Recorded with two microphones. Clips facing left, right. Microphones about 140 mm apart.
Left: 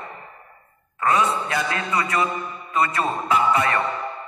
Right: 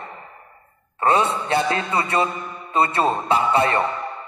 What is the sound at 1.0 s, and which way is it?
A man's voice, 30° right (ahead or behind).